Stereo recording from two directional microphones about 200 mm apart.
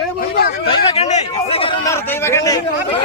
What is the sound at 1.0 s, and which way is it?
Speech, 30° left (ahead or behind).